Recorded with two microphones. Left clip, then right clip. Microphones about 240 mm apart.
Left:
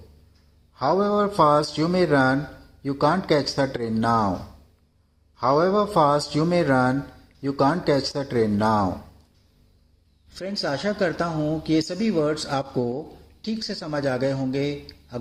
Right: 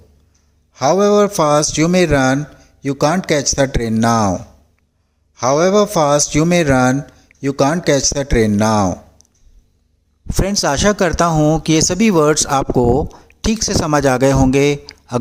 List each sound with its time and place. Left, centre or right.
0.7 s speech: right
10.2 s speech: right